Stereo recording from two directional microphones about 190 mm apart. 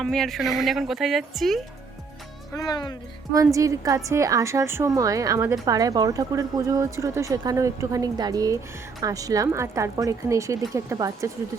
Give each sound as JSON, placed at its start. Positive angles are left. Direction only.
{"t": 0.0, "sound": "a woman's voice", "side_deg": 0}
{"t": 2.5, "sound": "speech", "side_deg": 20}
{"t": 3.3, "sound": "speech", "side_deg": -15}